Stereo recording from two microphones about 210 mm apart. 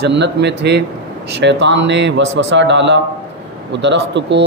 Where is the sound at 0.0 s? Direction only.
55° right (ahead or behind).